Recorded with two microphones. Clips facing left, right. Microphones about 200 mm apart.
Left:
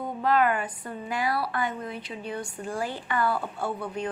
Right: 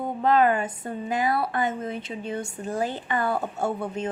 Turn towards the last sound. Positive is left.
turn(degrees=-45)  # may be behind; listen again after turning